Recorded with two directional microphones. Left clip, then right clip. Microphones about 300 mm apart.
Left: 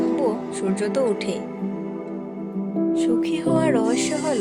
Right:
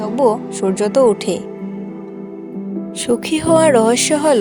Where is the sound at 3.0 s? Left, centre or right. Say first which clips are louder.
Right 8 dB; right.